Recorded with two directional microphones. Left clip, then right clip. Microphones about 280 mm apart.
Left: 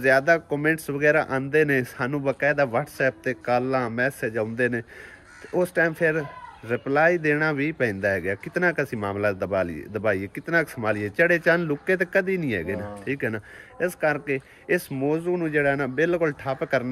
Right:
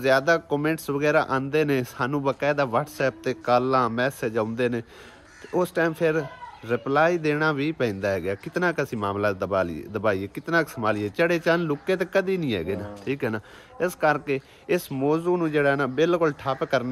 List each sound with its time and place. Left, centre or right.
0.0 s speech: centre